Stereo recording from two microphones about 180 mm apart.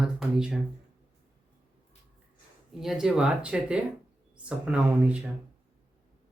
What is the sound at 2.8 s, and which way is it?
Speech, centre (ahead or behind).